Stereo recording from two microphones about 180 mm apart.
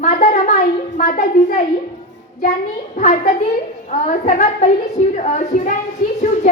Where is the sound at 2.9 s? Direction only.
40° left (ahead or behind).